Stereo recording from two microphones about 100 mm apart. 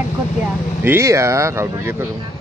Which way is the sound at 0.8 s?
25° right (ahead or behind).